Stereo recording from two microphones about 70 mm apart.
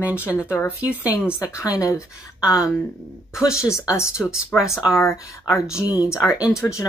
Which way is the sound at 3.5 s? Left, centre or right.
Centre.